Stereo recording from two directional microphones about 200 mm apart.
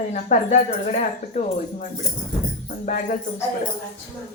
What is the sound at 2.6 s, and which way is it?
Music, 35° left (ahead or behind).